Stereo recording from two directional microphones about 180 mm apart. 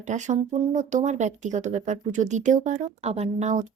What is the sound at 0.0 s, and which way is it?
Speech, 40° right (ahead or behind).